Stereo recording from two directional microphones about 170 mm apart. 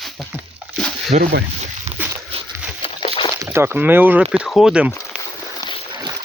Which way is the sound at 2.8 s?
30° left (ahead or behind).